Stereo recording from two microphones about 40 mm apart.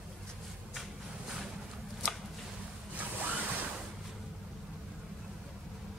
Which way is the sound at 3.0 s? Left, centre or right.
Right.